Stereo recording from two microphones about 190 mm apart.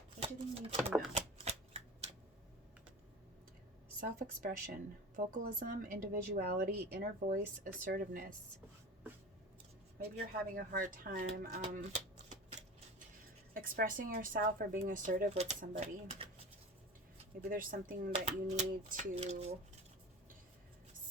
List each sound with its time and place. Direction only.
0.2 s speech: 30° right (ahead or behind)
1.1 s shuffling cards: 35° right (ahead or behind)
4.0 s a woman's voice: 45° right (ahead or behind)
10.0 s speech: 55° right (ahead or behind); by 12.6 s 40° right (ahead or behind)
13.5 s a woman's voice: 50° right (ahead or behind)
15.8 s speech: 30° right (ahead or behind)
17.5 s a woman's voice: 45° right (ahead or behind)
18.1 s speech: 35° right (ahead or behind)